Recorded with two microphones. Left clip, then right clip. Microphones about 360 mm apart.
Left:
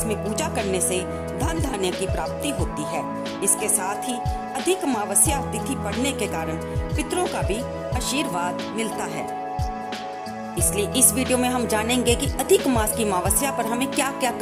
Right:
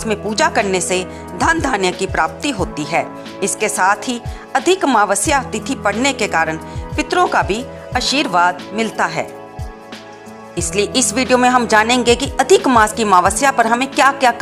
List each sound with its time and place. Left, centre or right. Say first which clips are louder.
0.1 s speech: right 13 dB; left
6.9 s music: right 11 dB; left
7.3 s speech: right 9 dB; left
10.6 s speech: right 7 dB; left